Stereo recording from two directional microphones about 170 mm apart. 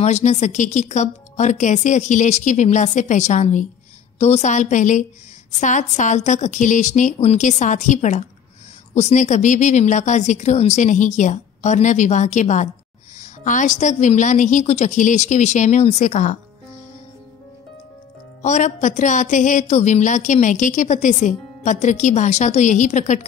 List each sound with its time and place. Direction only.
0.0 s a woman's voice: 40° left (ahead or behind)
18.4 s a woman's voice: 45° left (ahead or behind)